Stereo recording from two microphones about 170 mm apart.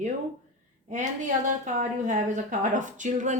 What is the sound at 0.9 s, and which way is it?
A woman's voice, 50° right (ahead or behind).